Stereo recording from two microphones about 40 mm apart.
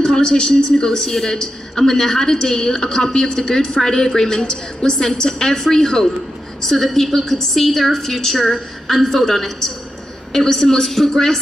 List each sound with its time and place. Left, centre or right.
0.0 s a woman's voice: centre